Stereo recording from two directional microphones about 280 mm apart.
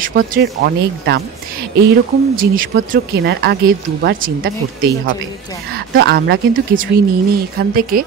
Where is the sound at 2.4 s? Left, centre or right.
Right.